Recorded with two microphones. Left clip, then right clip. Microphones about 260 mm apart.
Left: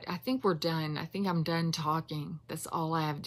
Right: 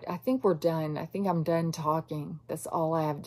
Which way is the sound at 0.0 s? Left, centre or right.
Left.